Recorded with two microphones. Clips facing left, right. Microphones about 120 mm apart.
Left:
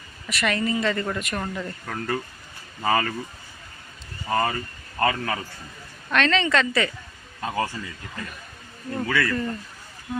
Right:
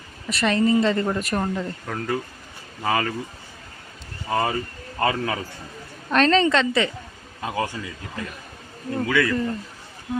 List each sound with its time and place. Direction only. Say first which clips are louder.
0.3 s speech: right 5 dB; 30° right (ahead or behind)
1.9 s speech: right 1 dB; 5° right (ahead or behind)
4.3 s speech: right 1 dB; 10° right (ahead or behind)
6.1 s a woman's voice: right 4 dB; 35° right (ahead or behind)
7.4 s speech: even; 15° right (ahead or behind)
8.9 s speech: right 3 dB; 5° right (ahead or behind)